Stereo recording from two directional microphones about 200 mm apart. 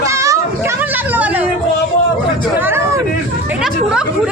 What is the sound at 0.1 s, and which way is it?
Children playing, 15° right (ahead or behind).